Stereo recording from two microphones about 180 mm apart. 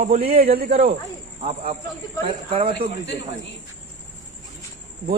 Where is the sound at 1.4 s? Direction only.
35° right (ahead or behind).